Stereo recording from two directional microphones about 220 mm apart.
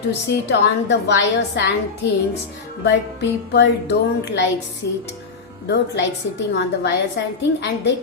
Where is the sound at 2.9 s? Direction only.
50° left (ahead or behind).